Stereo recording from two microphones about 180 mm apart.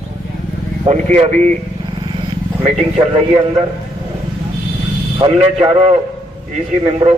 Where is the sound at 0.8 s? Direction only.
35° right (ahead or behind).